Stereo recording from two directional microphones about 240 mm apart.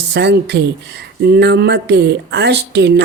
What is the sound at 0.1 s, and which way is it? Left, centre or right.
Speech, right.